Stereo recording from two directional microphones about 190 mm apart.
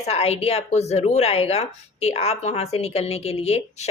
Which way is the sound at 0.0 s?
30° left (ahead or behind).